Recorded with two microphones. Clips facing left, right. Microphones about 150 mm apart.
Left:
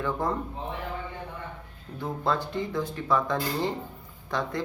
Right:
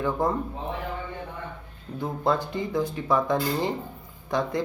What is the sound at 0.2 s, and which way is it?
Speech, 10° right (ahead or behind).